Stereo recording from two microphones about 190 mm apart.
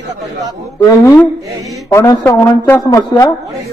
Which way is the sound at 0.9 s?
15° left (ahead or behind).